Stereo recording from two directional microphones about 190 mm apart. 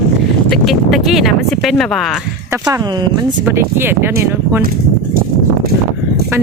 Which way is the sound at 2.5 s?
20° right (ahead or behind).